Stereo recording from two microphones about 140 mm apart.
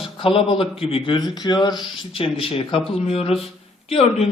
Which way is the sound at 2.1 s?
40° left (ahead or behind).